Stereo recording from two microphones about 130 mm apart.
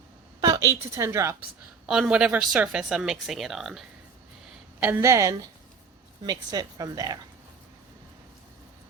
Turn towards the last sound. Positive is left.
turn(degrees=-30)  # may be behind; listen again after turning